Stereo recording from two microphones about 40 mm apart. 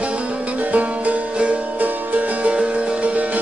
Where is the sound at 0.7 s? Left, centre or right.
Right.